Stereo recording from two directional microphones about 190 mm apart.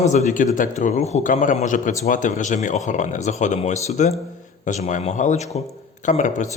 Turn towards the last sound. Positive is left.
turn(degrees=40)  # may be behind; listen again after turning